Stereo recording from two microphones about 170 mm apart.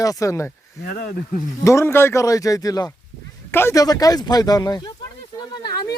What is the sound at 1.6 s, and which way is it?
Speech, 15° left (ahead or behind).